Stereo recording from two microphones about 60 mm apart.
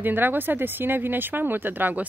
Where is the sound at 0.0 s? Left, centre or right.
Right.